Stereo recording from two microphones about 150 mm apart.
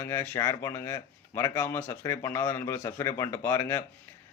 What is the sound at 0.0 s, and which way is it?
Speech, 15° left (ahead or behind).